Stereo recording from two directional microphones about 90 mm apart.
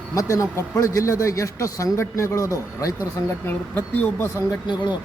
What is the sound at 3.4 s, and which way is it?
Speech, 20° left (ahead or behind).